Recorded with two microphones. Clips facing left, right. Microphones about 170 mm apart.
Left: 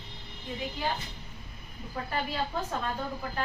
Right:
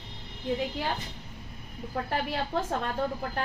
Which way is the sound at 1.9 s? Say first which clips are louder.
Right 3 dB; 65° right (ahead or behind).